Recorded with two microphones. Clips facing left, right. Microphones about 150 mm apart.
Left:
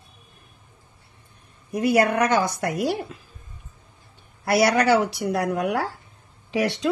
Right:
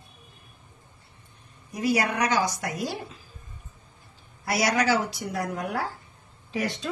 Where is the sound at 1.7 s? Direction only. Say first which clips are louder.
Left 6 dB; 55° left (ahead or behind).